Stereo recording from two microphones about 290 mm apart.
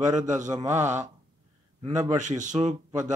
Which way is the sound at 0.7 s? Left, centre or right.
Right.